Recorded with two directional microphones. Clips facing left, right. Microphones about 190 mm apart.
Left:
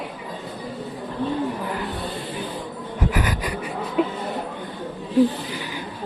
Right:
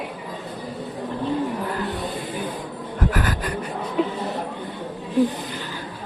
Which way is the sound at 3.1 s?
10° left (ahead or behind).